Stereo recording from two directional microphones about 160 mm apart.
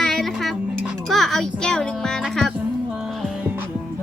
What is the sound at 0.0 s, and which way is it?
A child's voice, centre (ahead or behind).